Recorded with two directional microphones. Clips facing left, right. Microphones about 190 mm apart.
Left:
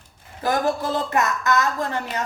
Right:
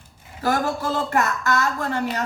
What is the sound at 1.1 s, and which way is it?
Speech, 20° left (ahead or behind).